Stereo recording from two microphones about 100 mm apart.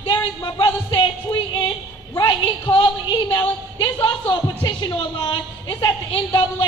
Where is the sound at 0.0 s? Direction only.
45° left (ahead or behind).